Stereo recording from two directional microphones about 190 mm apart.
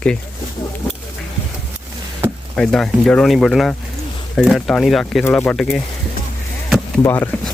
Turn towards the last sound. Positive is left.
turn(degrees=10)  # may be behind; listen again after turning